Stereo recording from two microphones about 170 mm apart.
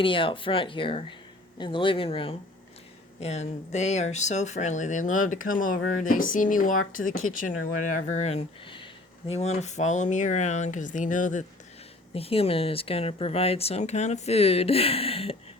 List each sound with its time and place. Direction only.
0.0 s speech: 30° left (ahead or behind); by 11.4 s 50° left (ahead or behind)
12.1 s speech: 35° left (ahead or behind)